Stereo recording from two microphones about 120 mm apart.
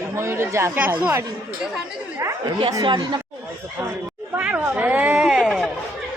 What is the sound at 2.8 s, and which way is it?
Speech, 40° right (ahead or behind).